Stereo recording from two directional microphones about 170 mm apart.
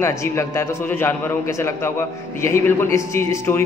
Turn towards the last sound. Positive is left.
turn(degrees=15)  # may be behind; listen again after turning